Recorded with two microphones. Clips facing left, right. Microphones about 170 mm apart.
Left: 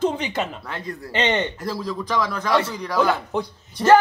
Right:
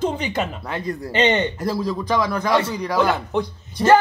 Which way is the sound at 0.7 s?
10° right (ahead or behind).